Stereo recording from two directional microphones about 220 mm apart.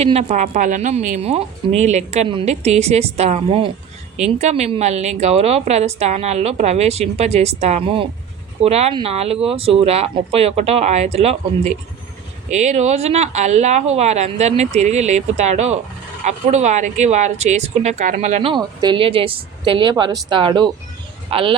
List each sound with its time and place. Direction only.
0.0 s speech: 30° right (ahead or behind)
18.5 s speech: 20° right (ahead or behind)